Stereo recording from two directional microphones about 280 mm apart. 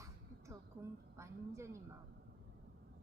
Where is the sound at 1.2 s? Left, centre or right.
Centre.